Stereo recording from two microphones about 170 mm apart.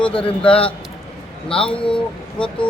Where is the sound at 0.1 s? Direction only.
30° left (ahead or behind).